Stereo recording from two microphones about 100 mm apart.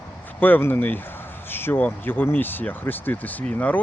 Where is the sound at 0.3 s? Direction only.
20° left (ahead or behind).